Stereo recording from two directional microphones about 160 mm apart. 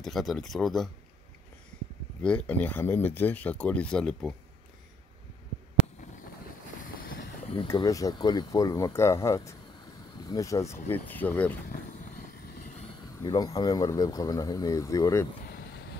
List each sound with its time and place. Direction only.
0.0 s speech: centre (ahead or behind)
2.2 s speech: 10° left (ahead or behind)
7.4 s speech: 35° left (ahead or behind); by 11.5 s 10° left (ahead or behind)
11.6 s a sound: 65° left (ahead or behind)
13.0 s speech: 25° left (ahead or behind)